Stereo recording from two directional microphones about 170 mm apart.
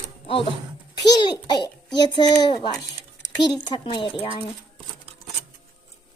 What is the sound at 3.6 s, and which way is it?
Speech, 25° left (ahead or behind).